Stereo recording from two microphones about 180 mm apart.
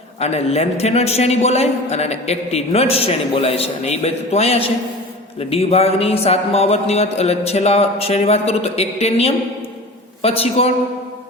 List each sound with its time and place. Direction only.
0.2 s a man's voice: 35° left (ahead or behind)